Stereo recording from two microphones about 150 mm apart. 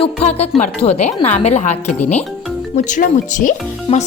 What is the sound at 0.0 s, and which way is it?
A woman's voice, 45° left (ahead or behind).